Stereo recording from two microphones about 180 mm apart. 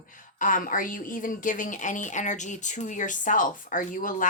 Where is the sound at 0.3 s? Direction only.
45° left (ahead or behind).